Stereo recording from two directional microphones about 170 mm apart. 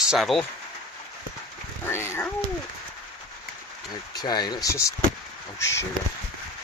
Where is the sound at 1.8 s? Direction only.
15° left (ahead or behind).